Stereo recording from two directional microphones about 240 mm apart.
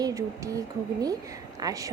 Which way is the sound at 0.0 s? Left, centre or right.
Centre.